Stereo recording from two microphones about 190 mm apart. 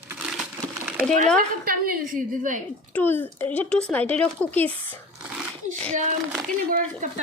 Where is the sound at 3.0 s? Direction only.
10° left (ahead or behind).